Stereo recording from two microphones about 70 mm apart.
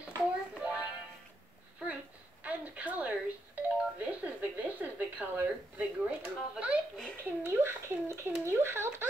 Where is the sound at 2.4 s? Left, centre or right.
Right.